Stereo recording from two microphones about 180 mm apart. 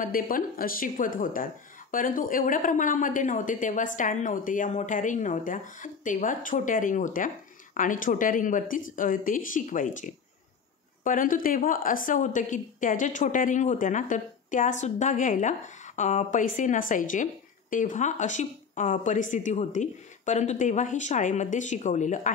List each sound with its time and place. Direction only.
0.0 s a woman's voice: 50° left (ahead or behind)